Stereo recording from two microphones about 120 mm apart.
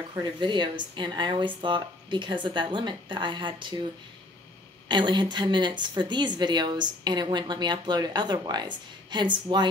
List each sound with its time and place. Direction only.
0.2 s a woman's voice: 40° right (ahead or behind)
4.8 s a woman's voice: 40° right (ahead or behind)